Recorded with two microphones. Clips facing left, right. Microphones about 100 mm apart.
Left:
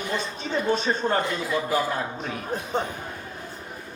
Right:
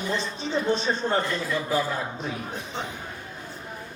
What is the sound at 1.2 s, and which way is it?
Speech, 15° left (ahead or behind).